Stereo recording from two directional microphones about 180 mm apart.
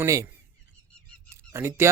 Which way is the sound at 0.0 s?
15° right (ahead or behind).